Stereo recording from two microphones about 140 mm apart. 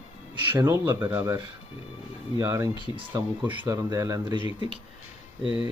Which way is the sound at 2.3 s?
20° right (ahead or behind).